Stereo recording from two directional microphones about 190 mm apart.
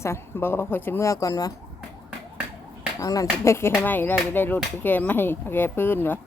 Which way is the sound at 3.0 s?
20° left (ahead or behind).